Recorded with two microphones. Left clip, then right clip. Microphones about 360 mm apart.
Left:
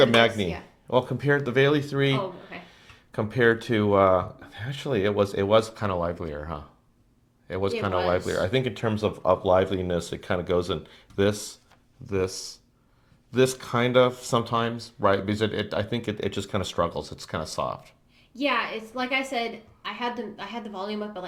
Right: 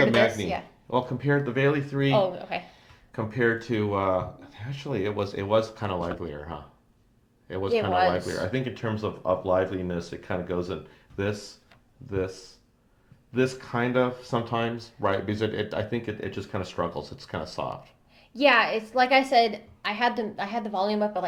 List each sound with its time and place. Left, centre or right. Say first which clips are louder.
0.0 s speech: left 2 dB; left
7.7 s a woman's voice: right 3 dB; right
8.5 s speech: left 4 dB; left
13.3 s speech: left 4 dB; left
18.3 s a woman's voice: right 6 dB; right